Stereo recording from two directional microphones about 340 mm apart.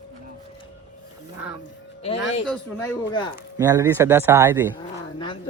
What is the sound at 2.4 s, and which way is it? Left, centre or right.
Speech, centre.